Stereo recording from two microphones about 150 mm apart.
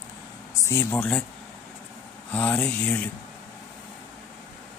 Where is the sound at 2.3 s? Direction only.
10° left (ahead or behind).